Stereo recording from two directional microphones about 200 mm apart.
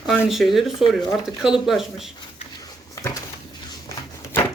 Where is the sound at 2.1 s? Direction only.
15° left (ahead or behind).